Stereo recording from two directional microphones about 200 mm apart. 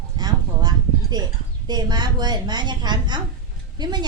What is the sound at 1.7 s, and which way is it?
A woman's voice, 20° right (ahead or behind).